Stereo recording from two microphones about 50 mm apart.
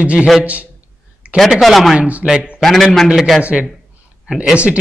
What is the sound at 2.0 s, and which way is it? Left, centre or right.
Speech, right.